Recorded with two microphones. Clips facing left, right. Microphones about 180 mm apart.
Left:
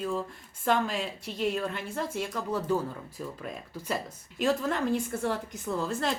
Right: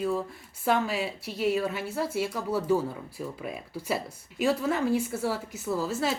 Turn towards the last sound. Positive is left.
turn(degrees=-5)  # may be behind; listen again after turning